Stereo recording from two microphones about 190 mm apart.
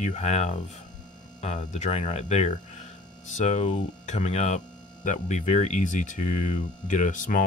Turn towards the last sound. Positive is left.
turn(degrees=45)  # may be behind; listen again after turning